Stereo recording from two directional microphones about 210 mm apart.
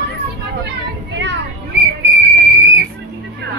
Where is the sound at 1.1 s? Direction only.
60° right (ahead or behind).